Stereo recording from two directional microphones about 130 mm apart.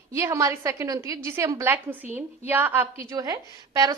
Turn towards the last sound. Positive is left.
turn(degrees=-25)  # may be behind; listen again after turning